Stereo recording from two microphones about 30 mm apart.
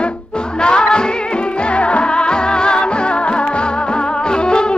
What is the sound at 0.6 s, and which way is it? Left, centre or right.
Music, left.